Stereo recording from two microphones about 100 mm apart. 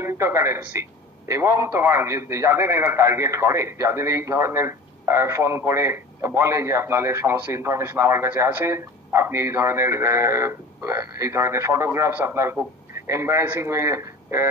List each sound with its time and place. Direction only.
0.0 s a man's voice: 25° right (ahead or behind)